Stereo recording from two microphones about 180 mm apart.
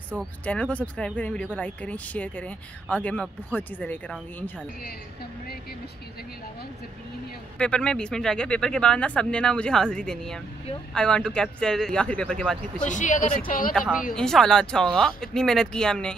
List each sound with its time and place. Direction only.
0.2 s speech: 5° left (ahead or behind)
7.5 s speech: 5° left (ahead or behind)
12.8 s speech: 45° left (ahead or behind)
14.1 s speech: 5° left (ahead or behind)